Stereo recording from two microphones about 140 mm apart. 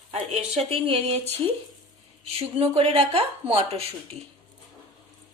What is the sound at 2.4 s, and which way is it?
Speech, 45° right (ahead or behind).